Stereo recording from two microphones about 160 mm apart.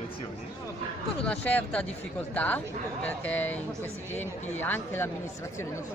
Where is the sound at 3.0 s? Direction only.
10° left (ahead or behind).